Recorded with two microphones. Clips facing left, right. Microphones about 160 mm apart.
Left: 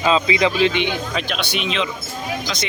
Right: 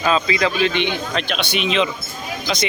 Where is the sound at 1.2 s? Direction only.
5° left (ahead or behind).